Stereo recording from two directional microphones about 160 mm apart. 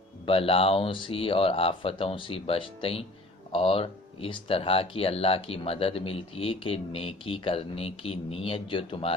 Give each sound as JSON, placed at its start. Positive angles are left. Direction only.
{"t": 0.3, "sound": "speech", "side_deg": 35}